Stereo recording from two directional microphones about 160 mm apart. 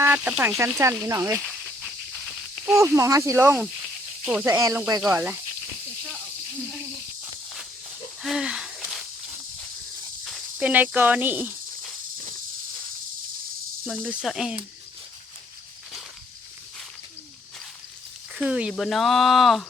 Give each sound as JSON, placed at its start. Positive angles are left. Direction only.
{"t": 0.0, "sound": "speech", "side_deg": -10}
{"t": 0.8, "sound": "speech", "side_deg": -15}
{"t": 1.4, "sound": "a sound", "side_deg": 0}
{"t": 2.7, "sound": "speech", "side_deg": -15}
{"t": 8.2, "sound": "a sound", "side_deg": -5}
{"t": 10.2, "sound": "snake", "side_deg": 0}
{"t": 10.7, "sound": "speech", "side_deg": -10}
{"t": 14.1, "sound": "speech", "side_deg": 0}
{"t": 18.3, "sound": "speech", "side_deg": -5}